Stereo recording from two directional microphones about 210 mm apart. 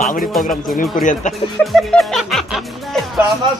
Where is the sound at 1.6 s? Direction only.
Centre (ahead or behind).